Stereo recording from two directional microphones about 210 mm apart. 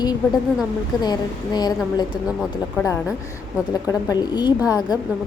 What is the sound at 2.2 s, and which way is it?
Speech, centre (ahead or behind).